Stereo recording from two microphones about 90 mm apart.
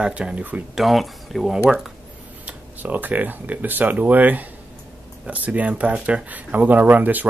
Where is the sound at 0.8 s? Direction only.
Centre (ahead or behind).